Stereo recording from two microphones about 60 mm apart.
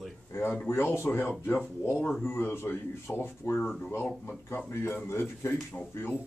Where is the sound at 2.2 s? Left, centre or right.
Left.